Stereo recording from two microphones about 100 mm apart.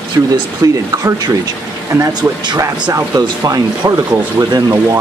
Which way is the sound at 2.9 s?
35° right (ahead or behind).